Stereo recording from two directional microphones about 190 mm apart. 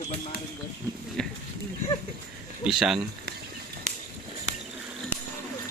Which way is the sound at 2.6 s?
Centre (ahead or behind).